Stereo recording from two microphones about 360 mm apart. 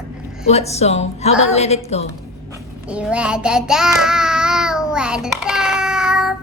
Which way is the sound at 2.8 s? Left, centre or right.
Centre.